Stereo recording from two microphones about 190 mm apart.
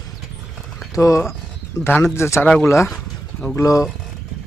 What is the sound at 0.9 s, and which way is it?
Speech, 15° left (ahead or behind).